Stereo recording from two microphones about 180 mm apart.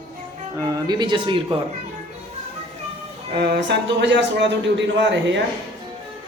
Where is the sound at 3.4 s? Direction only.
70° right (ahead or behind).